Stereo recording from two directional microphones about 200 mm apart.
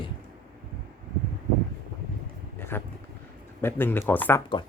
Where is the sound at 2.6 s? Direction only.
10° left (ahead or behind).